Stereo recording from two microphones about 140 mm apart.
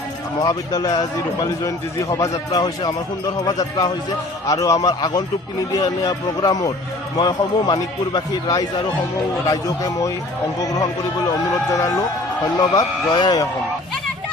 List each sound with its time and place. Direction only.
0.4 s speech: 25° left (ahead or behind)